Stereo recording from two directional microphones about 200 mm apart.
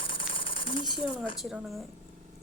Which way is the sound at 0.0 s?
25° left (ahead or behind).